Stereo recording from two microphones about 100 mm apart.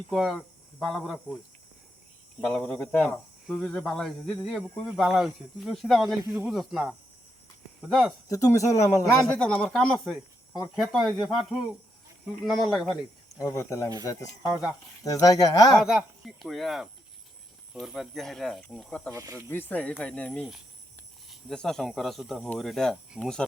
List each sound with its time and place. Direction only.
0.1 s speech: centre (ahead or behind)
2.7 s speech: 15° left (ahead or behind)
3.4 s speech: centre (ahead or behind)
8.3 s speech: 35° left (ahead or behind)
9.3 s speech: 5° left (ahead or behind)
13.4 s speech: 30° left (ahead or behind)
14.4 s speech: 5° right (ahead or behind)
15.0 s speech: 35° left (ahead or behind)
15.8 s speech: 5° right (ahead or behind)
19.1 s speech: 35° right (ahead or behind)
19.4 s speech: 20° left (ahead or behind)